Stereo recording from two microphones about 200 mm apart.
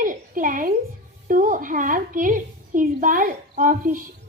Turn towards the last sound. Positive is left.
turn(degrees=-40)  # may be behind; listen again after turning